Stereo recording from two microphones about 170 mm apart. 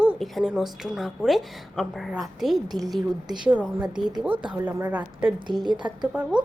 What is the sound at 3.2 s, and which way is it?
Speech, 25° right (ahead or behind).